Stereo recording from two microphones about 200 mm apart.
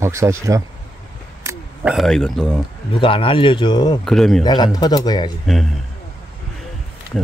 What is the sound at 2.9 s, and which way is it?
Speech, 25° left (ahead or behind).